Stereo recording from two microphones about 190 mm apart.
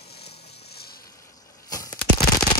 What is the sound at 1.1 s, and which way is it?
Arrow, 20° left (ahead or behind).